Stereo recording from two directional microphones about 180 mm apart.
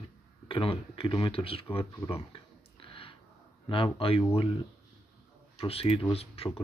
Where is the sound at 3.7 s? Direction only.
30° left (ahead or behind).